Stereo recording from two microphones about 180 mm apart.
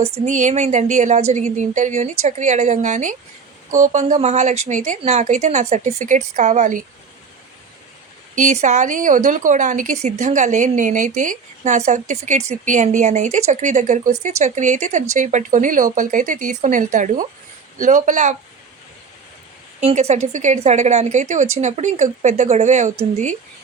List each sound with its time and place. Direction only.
0.3 s a woman's voice: 40° right (ahead or behind)
8.4 s speech: 40° right (ahead or behind)
19.8 s a woman's voice: 35° right (ahead or behind)